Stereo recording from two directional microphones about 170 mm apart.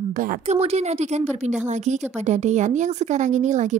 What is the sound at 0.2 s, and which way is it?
Speech, 55° right (ahead or behind).